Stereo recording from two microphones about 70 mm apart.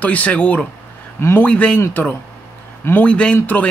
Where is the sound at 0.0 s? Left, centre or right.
Left.